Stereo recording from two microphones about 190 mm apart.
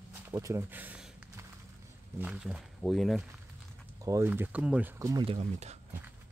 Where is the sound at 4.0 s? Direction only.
15° right (ahead or behind).